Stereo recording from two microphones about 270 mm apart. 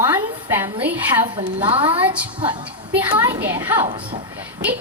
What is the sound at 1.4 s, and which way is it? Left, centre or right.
Speech, centre.